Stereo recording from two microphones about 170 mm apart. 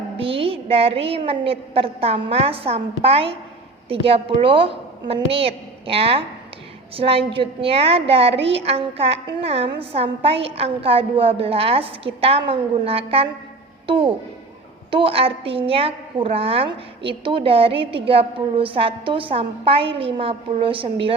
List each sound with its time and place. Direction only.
0.2 s a woman's voice: 35° right (ahead or behind)